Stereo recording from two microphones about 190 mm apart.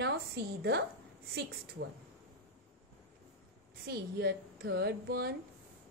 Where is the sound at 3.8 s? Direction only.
55° right (ahead or behind).